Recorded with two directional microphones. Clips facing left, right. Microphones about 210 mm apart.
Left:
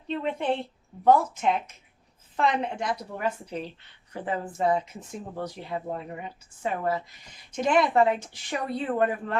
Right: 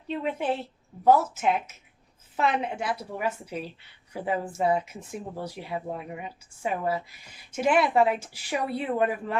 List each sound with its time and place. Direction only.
0.1 s a woman's voice: 5° right (ahead or behind)